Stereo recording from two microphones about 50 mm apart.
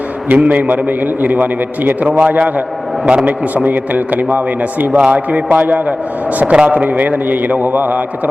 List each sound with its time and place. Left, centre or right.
0.3 s a man's voice: right
4.9 s a man's voice: right
6.4 s a man's voice: centre